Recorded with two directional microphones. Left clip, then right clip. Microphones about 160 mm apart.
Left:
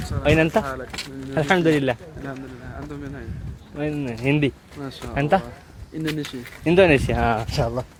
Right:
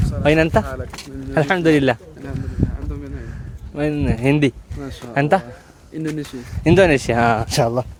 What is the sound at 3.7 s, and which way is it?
Speech, 45° right (ahead or behind).